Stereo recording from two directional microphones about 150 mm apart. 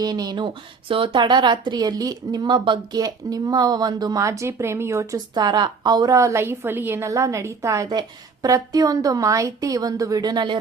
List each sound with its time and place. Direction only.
0.0 s speech: 25° right (ahead or behind)